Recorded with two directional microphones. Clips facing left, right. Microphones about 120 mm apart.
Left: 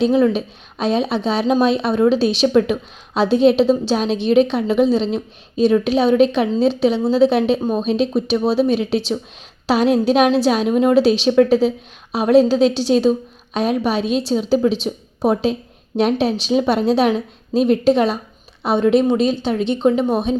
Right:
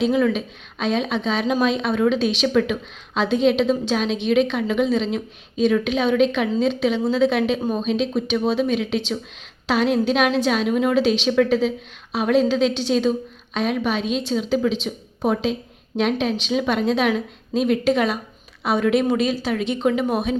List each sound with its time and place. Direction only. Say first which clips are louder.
0.1 s a woman's voice: left 4 dB; 30° left (ahead or behind)